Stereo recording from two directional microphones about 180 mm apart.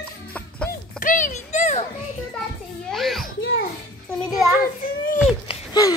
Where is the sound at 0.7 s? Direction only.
50° left (ahead or behind).